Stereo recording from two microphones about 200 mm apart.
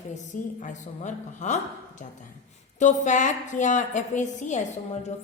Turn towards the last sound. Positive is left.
turn(degrees=35)  # may be behind; listen again after turning